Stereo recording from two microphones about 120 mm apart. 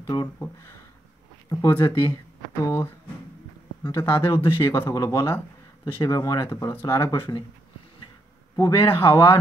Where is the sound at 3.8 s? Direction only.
25° left (ahead or behind).